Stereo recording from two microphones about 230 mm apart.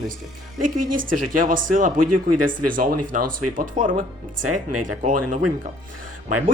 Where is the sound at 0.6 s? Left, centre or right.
Right.